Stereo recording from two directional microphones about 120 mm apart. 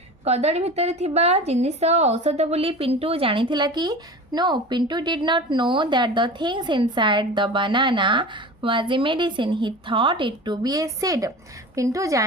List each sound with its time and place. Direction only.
0.3 s a woman's voice: 60° right (ahead or behind); by 12.2 s 25° right (ahead or behind)